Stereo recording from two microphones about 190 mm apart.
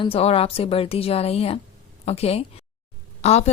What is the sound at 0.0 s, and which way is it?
A woman's voice, 30° left (ahead or behind).